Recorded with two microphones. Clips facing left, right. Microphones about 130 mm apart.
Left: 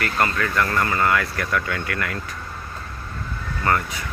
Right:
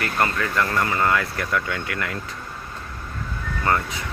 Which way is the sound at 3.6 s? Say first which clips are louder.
Even; 20° right (ahead or behind).